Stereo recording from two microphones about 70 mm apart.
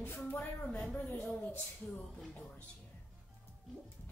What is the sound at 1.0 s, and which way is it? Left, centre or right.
Speech, left.